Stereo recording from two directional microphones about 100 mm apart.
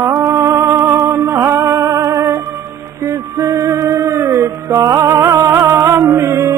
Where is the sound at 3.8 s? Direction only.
20° right (ahead or behind).